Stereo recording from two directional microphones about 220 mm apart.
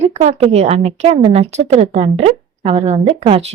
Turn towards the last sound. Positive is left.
turn(degrees=-25)  # may be behind; listen again after turning